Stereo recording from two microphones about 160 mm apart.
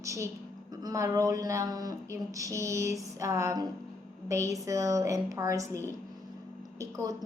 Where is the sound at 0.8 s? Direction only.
20° right (ahead or behind).